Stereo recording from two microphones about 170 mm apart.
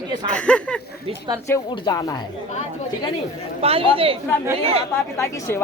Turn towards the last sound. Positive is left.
turn(degrees=15)  # may be behind; listen again after turning